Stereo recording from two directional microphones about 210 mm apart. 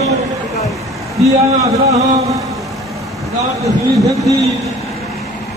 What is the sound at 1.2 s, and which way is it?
Speech, 15° right (ahead or behind).